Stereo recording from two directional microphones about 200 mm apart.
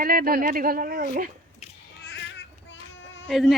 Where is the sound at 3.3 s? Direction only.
Centre (ahead or behind).